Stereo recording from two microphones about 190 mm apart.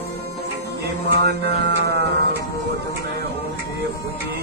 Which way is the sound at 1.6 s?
60° right (ahead or behind).